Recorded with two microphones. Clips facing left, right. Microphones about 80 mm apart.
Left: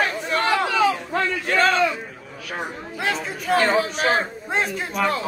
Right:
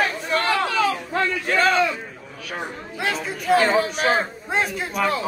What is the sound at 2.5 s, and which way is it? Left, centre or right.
Chatter, centre.